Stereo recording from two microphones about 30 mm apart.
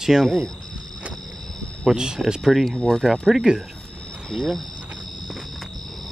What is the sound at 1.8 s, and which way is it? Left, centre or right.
Speech, right.